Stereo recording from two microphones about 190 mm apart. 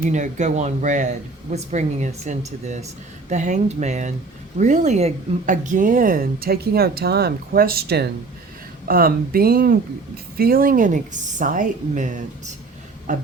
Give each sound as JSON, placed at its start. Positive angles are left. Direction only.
{"t": 0.0, "sound": "speech", "side_deg": -40}